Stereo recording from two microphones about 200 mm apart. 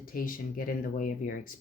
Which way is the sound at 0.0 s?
45° left (ahead or behind).